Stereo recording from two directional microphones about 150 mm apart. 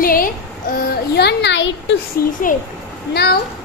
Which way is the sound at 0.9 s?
90° left.